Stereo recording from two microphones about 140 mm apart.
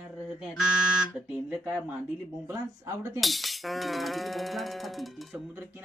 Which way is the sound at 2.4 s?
20° right (ahead or behind).